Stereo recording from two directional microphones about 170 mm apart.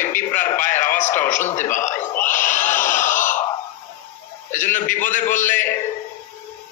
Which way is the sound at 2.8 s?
50° left (ahead or behind).